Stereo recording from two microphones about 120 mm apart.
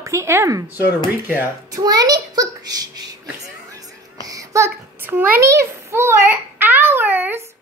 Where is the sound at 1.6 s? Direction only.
30° right (ahead or behind).